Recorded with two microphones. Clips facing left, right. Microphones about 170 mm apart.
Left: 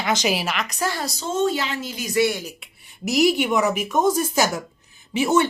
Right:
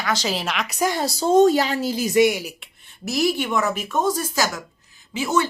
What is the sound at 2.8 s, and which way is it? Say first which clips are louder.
A woman's voice: left 3 dB; 15° left (ahead or behind).